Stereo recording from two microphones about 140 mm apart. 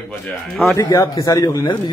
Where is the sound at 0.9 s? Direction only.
25° left (ahead or behind).